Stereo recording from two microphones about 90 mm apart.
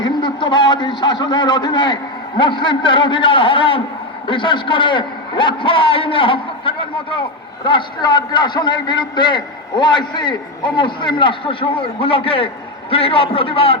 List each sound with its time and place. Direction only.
0.0 s a man's voice: 55° left (ahead or behind); by 13.7 s 90° left